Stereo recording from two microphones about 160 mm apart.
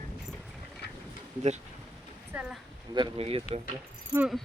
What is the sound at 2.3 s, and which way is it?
Speech, 10° right (ahead or behind).